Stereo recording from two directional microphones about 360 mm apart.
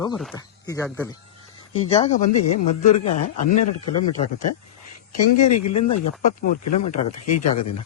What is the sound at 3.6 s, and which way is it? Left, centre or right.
Speech, left.